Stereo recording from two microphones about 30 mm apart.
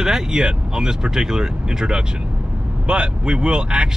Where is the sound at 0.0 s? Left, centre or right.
Centre.